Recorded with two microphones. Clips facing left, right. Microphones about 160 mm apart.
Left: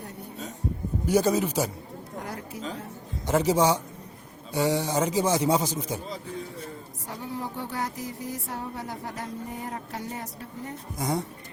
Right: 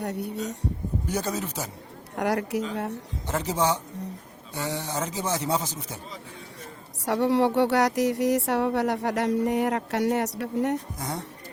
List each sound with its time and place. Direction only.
0.0 s speech: 75° right (ahead or behind)
1.0 s a man's voice: 10° left (ahead or behind)
2.1 s speech: 80° right
3.2 s a man's voice: 10° left (ahead or behind)
7.0 s speech: 80° right
10.9 s a man's voice: 10° left (ahead or behind)